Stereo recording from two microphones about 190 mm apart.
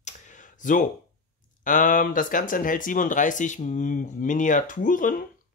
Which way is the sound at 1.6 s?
45° left (ahead or behind).